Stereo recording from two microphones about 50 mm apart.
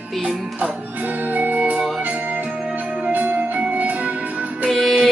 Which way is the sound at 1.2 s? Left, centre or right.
Right.